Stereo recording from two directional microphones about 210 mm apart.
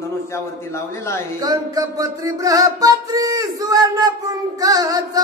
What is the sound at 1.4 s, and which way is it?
Music, 15° right (ahead or behind).